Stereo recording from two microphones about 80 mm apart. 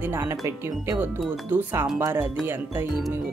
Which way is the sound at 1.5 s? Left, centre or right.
Right.